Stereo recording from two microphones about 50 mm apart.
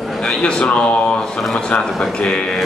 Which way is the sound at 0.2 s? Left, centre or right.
Centre.